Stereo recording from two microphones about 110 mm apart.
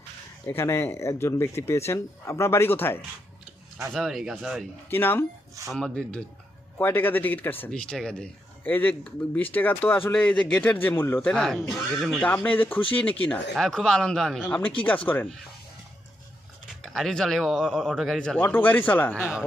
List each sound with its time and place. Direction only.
0.4 s speech: 25° left (ahead or behind)
3.9 s speech: centre (ahead or behind)
4.9 s speech: 20° left (ahead or behind)
5.7 s speech: 5° left (ahead or behind)
7.7 s speech: 5° left (ahead or behind)
12.2 s speech: 15° left (ahead or behind)
13.6 s speech: 5° left (ahead or behind)
14.4 s speech: 15° left (ahead or behind)
16.8 s speech: centre (ahead or behind)
18.4 s speech: 15° left (ahead or behind)